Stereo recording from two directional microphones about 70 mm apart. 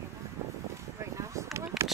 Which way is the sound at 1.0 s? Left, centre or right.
Right.